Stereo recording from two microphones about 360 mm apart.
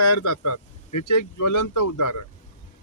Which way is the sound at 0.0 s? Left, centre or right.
Left.